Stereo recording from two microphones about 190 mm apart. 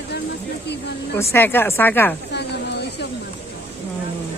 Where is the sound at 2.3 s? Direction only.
65° left (ahead or behind).